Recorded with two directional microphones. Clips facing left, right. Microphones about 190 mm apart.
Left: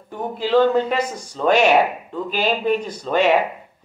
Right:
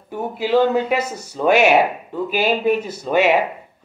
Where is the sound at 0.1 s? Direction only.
10° right (ahead or behind).